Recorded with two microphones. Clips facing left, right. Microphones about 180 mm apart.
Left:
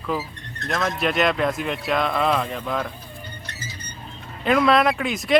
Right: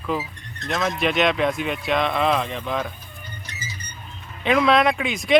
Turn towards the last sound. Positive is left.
turn(degrees=0)  # may be behind; listen again after turning